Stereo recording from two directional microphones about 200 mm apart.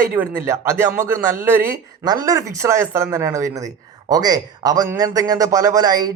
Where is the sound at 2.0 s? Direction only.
20° right (ahead or behind).